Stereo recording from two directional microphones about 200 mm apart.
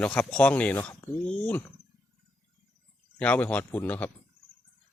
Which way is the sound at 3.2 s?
5° left (ahead or behind).